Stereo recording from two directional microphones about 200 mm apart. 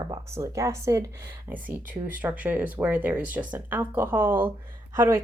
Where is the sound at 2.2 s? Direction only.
10° right (ahead or behind).